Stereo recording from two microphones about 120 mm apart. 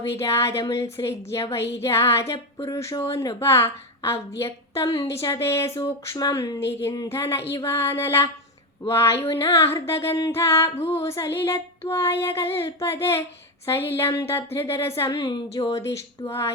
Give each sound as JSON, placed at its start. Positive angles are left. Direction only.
{"t": 0.2, "sound": "a woman's voice", "side_deg": 25}